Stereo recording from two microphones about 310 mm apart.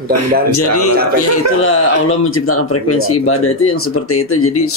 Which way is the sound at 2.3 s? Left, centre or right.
Left.